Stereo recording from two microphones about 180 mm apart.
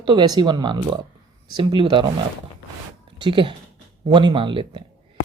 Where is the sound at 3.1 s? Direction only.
25° right (ahead or behind).